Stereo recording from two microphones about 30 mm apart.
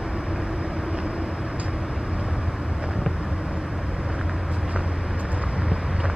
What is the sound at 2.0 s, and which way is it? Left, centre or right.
Vehicle, right.